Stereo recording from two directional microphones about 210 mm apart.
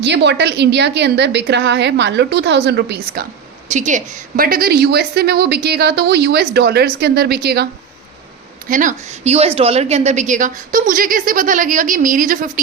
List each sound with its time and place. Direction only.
0.0 s a woman's voice: 55° right (ahead or behind)
3.7 s a woman's voice: 35° right (ahead or behind)
8.7 s a woman's voice: 40° right (ahead or behind)